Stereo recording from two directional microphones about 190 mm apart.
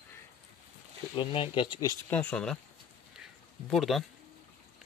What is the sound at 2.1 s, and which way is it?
Speech, 5° left (ahead or behind).